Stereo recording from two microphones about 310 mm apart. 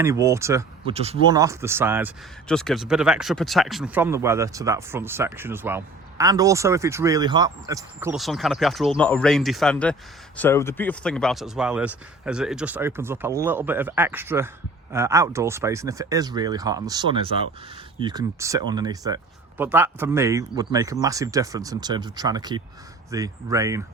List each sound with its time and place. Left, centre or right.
0.0 s speech: centre
0.9 s speech: centre